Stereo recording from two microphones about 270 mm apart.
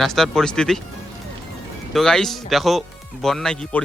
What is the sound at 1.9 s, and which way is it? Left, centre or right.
Speech, centre.